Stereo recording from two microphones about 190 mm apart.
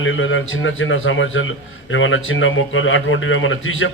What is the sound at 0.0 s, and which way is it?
A man's voice, 90° left.